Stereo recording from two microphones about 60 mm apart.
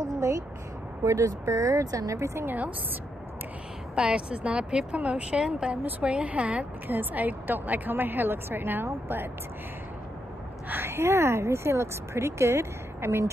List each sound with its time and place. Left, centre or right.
0.0 s a sound: right
1.0 s speech: right
2.4 s a woman's voice: right
3.9 s a woman's voice: centre; by 8.8 s right
10.7 s speech: right